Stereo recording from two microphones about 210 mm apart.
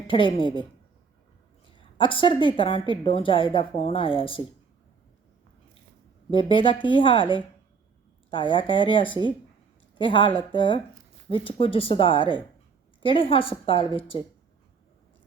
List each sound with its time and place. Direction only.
0.1 s a woman's voice: 25° left (ahead or behind)
1.7 s a woman's voice: 25° left (ahead or behind)
6.3 s a woman's voice: 25° left (ahead or behind)